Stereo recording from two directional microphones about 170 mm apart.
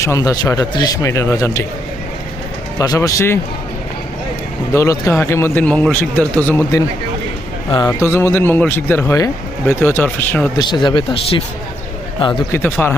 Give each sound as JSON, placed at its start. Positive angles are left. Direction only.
{"t": 0.0, "sound": "a man's voice", "side_deg": 20}
{"t": 2.7, "sound": "a man's voice", "side_deg": 20}
{"t": 4.7, "sound": "speech", "side_deg": 20}
{"t": 7.9, "sound": "speech", "side_deg": 15}
{"t": 10.6, "sound": "a man's voice", "side_deg": 25}
{"t": 12.5, "sound": "speech", "side_deg": 10}